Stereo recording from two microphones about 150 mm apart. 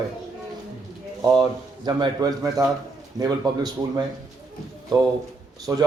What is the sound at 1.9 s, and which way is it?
Speech, 30° right (ahead or behind).